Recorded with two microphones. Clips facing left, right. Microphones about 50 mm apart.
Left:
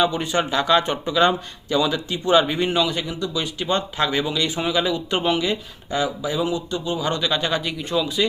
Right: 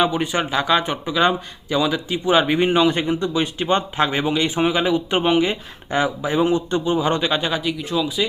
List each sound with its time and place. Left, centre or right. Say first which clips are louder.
0.0 s speech: right 1 dB; centre
7.5 s speech: right 1 dB; centre